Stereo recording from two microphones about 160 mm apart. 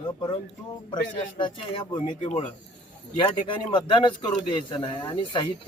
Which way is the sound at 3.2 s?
30° left (ahead or behind).